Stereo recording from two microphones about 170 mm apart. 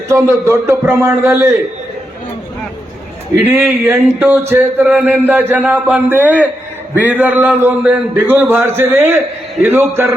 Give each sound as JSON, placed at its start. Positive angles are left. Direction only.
{"t": 0.1, "sound": "speech", "side_deg": -15}
{"t": 3.4, "sound": "speech", "side_deg": -10}